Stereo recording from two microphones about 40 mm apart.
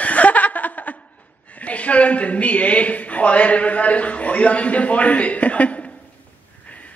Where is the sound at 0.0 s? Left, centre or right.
Left.